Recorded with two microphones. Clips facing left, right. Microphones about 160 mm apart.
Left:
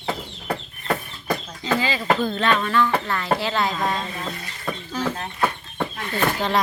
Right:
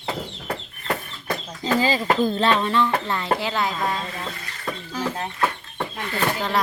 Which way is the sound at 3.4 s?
10° right (ahead or behind).